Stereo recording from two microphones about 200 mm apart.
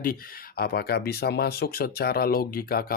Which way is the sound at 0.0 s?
45° left (ahead or behind).